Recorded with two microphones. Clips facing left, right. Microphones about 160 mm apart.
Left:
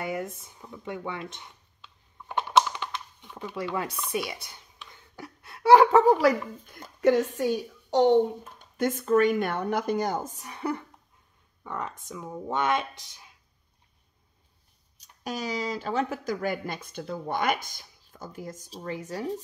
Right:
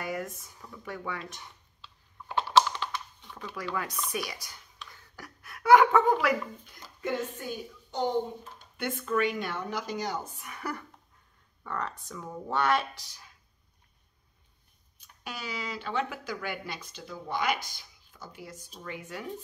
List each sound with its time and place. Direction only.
0.0 s speech: 25° left (ahead or behind)
2.6 s computer keyboard: 15° left (ahead or behind)
3.5 s speech: 25° left (ahead or behind)
6.6 s speech: 55° left (ahead or behind)
7.0 s a woman's voice: 85° left
8.5 s speech: 40° left (ahead or behind); by 13.3 s 20° left (ahead or behind)
15.0 s speech: 40° left (ahead or behind)